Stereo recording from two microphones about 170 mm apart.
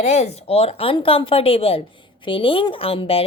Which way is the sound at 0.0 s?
35° left (ahead or behind).